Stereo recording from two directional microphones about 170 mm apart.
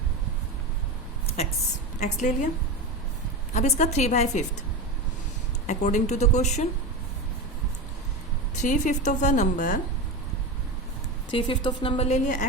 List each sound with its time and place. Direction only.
2.0 s a woman's voice: 45° left (ahead or behind)
3.5 s a woman's voice: 45° left (ahead or behind)
5.6 s a woman's voice: 45° left (ahead or behind)
8.5 s a woman's voice: 45° left (ahead or behind)
11.3 s a woman's voice: 30° left (ahead or behind)